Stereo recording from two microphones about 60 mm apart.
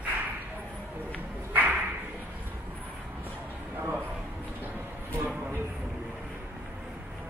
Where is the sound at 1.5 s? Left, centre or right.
Right.